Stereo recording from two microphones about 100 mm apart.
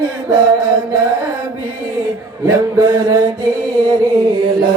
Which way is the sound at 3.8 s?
50° right (ahead or behind).